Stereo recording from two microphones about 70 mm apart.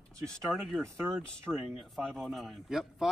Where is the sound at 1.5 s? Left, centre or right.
Centre.